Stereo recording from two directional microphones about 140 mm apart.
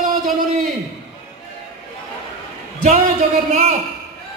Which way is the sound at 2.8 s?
55° right (ahead or behind).